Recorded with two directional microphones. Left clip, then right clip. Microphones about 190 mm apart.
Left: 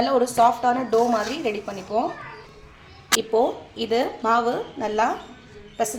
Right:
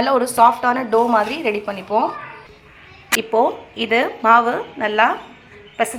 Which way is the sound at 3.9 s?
Centre (ahead or behind).